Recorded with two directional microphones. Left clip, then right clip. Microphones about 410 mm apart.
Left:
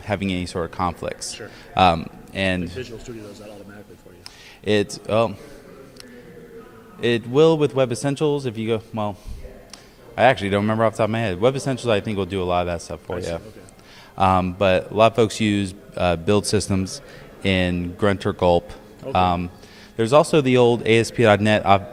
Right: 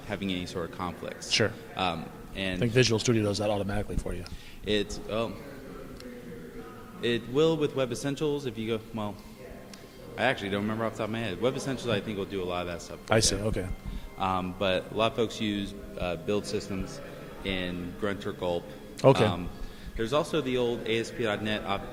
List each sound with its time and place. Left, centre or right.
0.1 s a man's voice: left
2.7 s speech: right
4.6 s a man's voice: left
7.0 s a man's voice: left
10.2 s a man's voice: left
13.1 s speech: right
14.2 s a man's voice: left